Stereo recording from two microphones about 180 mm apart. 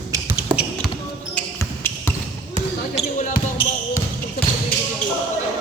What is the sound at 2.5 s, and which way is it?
Basketball bounce, 40° left (ahead or behind).